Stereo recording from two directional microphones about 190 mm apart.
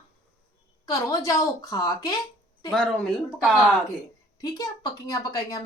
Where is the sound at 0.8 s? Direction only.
15° left (ahead or behind).